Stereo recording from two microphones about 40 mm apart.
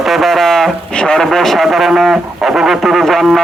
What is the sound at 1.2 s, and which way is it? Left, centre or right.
Speech, centre.